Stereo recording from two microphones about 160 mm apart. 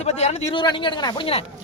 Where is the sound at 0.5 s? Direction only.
30° left (ahead or behind).